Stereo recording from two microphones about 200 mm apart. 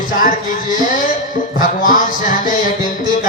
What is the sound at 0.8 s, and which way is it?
Speech, 40° left (ahead or behind).